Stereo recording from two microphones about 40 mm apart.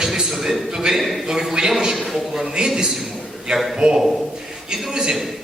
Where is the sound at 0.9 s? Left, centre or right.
Centre.